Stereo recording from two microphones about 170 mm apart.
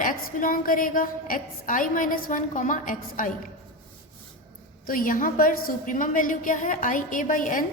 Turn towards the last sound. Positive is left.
turn(degrees=50)  # may be behind; listen again after turning